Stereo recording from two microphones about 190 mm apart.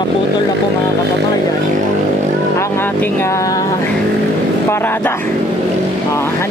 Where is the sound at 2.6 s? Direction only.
10° left (ahead or behind).